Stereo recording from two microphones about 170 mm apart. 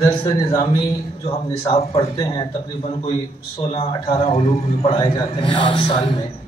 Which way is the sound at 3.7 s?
35° left (ahead or behind).